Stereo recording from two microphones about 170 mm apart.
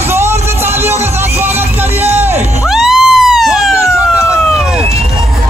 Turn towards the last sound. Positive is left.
turn(degrees=0)  # may be behind; listen again after turning